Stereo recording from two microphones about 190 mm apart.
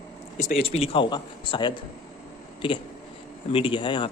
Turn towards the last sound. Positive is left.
turn(degrees=25)  # may be behind; listen again after turning